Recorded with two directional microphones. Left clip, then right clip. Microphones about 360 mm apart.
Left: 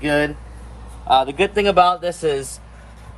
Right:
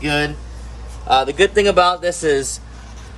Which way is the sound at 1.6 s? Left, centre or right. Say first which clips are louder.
Left 1 dB; centre.